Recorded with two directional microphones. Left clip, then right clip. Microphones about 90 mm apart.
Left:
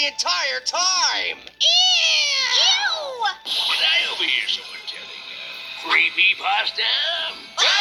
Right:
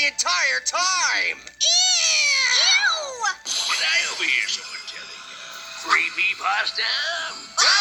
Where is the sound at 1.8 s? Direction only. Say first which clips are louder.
Left 2 dB; 10° left (ahead or behind).